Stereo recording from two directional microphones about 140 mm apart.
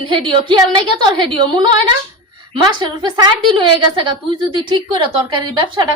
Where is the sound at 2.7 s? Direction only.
35° right (ahead or behind).